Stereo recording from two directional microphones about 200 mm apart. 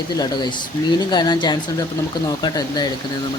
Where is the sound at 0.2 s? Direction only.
20° left (ahead or behind).